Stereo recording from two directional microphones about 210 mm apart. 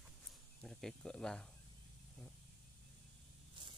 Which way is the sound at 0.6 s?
Centre (ahead or behind).